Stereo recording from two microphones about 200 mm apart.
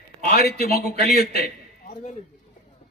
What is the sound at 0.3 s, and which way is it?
A man's voice, 50° left (ahead or behind).